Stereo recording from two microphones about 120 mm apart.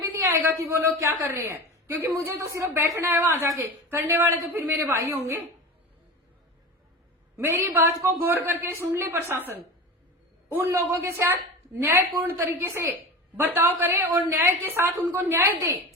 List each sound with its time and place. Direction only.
0.0 s speech: 20° right (ahead or behind)
7.3 s a woman's voice: 20° right (ahead or behind)
10.7 s a woman's voice: 20° right (ahead or behind)